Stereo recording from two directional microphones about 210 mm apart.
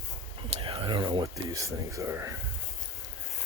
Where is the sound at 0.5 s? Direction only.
25° right (ahead or behind).